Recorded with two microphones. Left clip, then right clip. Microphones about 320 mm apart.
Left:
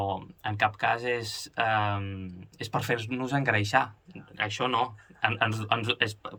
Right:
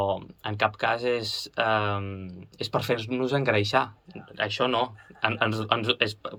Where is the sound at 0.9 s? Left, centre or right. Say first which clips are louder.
Right 3 dB; centre.